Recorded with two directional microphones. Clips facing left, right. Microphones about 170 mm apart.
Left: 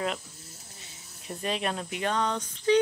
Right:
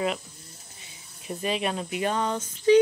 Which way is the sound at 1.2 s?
5° right (ahead or behind).